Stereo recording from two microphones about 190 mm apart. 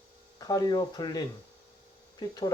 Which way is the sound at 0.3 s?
20° left (ahead or behind).